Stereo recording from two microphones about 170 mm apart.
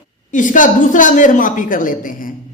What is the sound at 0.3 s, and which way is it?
A man's voice, 50° left (ahead or behind).